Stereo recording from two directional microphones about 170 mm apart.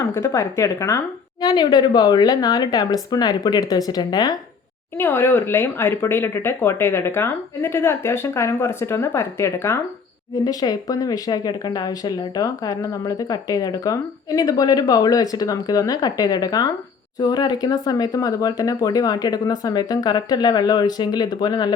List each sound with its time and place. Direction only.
0.0 s speech: 20° left (ahead or behind)